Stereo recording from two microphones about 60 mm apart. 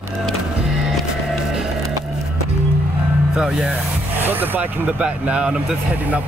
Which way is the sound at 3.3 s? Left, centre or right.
Centre.